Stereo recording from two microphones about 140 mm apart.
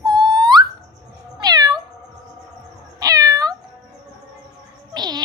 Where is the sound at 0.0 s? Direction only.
30° right (ahead or behind).